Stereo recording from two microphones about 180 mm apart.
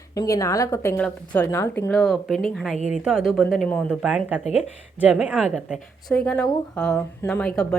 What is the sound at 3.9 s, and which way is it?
Speech, 5° right (ahead or behind).